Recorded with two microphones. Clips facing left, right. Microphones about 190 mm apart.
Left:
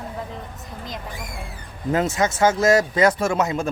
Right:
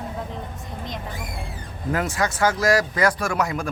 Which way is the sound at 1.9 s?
25° left (ahead or behind).